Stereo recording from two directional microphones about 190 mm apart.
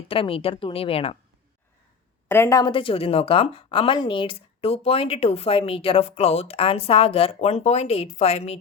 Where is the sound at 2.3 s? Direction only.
15° left (ahead or behind); by 8.5 s 35° left (ahead or behind).